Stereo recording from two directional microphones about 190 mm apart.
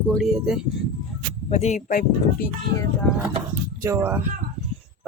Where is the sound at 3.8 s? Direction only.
15° right (ahead or behind).